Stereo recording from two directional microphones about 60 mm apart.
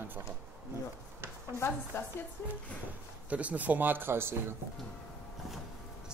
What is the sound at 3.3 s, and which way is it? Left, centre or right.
A man's voice, right.